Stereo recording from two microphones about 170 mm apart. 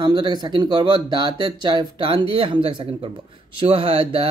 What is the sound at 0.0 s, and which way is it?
Mantra, 25° right (ahead or behind).